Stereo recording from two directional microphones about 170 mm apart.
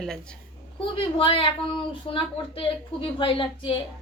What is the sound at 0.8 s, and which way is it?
A woman's voice, 30° left (ahead or behind).